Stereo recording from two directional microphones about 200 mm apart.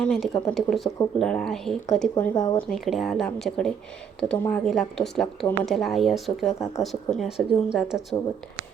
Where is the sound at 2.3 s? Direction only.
20° left (ahead or behind).